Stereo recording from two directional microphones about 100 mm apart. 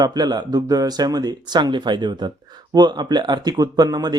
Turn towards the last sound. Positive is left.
turn(degrees=-40)  # may be behind; listen again after turning